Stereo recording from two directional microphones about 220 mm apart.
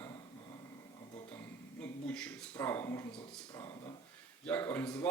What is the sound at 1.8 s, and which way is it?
Speech, 5° left (ahead or behind).